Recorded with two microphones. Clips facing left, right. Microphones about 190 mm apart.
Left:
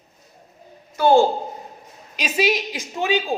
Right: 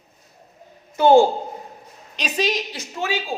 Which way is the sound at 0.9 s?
20° right (ahead or behind).